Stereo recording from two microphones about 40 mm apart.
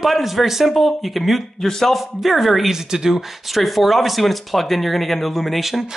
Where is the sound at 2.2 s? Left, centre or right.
Centre.